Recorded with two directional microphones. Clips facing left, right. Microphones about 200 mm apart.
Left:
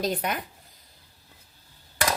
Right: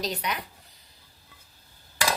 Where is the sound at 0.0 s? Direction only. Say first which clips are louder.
Left 4 dB; 50° left (ahead or behind).